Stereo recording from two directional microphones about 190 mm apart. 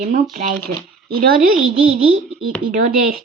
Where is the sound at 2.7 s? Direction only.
45° right (ahead or behind).